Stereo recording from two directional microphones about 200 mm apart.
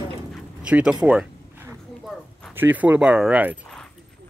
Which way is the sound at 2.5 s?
10° right (ahead or behind).